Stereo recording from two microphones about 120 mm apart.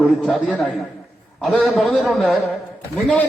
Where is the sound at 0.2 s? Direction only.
10° left (ahead or behind).